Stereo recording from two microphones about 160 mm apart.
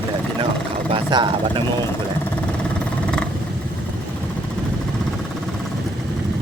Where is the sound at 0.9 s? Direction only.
30° right (ahead or behind).